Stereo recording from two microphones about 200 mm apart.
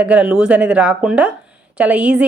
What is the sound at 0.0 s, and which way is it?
A woman's voice, 5° right (ahead or behind).